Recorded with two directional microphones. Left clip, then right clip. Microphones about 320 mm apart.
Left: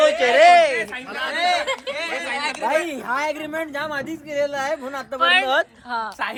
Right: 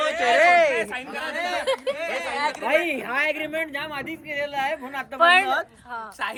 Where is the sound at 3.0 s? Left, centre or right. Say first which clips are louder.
Left 1 dB; left.